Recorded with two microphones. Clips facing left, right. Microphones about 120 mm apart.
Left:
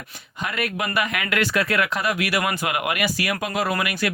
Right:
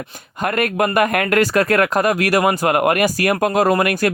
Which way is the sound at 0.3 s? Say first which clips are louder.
Right 8 dB; 50° right (ahead or behind).